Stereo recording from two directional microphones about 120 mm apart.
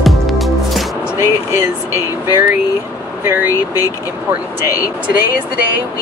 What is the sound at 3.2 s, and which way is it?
Vehicle, 20° right (ahead or behind).